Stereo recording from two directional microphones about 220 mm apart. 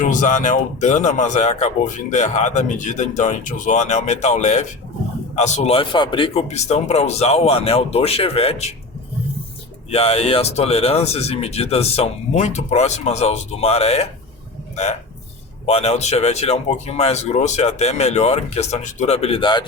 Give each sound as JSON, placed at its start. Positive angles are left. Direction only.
{"t": 0.0, "sound": "speech", "side_deg": 35}
{"t": 9.9, "sound": "speech", "side_deg": 25}
{"t": 15.6, "sound": "speech", "side_deg": 30}